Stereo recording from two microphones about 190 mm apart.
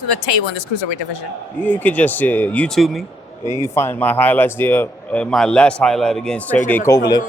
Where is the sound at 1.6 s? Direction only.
10° left (ahead or behind).